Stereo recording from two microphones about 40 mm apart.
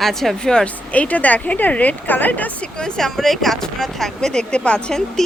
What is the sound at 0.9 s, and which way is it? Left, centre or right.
A woman's voice, left.